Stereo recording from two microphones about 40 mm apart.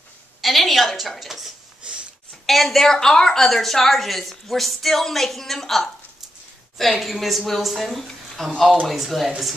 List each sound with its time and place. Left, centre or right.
0.4 s a woman's voice: centre
1.8 s a sound: right
2.4 s a woman's voice: centre
7.0 s a woman's voice: centre